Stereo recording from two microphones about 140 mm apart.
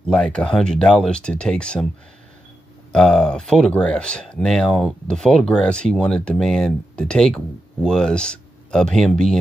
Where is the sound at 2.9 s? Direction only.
5° left (ahead or behind).